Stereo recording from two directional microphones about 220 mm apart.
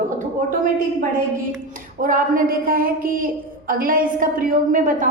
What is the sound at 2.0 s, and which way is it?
A woman's voice, 40° right (ahead or behind).